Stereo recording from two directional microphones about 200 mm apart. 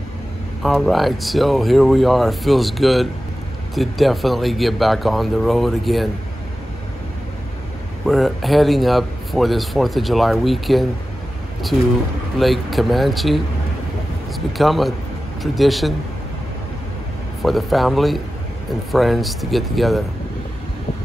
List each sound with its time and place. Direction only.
0.6 s speech: centre (ahead or behind)
8.1 s speech: centre (ahead or behind)
12.4 s speech: centre (ahead or behind)
14.6 s speech: centre (ahead or behind)
17.4 s speech: centre (ahead or behind)